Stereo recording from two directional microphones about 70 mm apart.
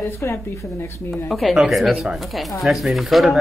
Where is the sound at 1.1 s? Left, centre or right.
Centre.